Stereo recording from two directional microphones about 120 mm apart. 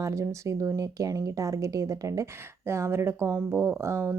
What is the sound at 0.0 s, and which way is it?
Speech, 25° right (ahead or behind).